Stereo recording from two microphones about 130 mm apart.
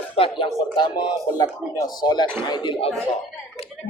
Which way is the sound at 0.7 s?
35° left (ahead or behind).